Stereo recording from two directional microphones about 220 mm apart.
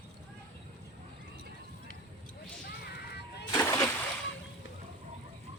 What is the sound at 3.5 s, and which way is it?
Splash, 10° left (ahead or behind).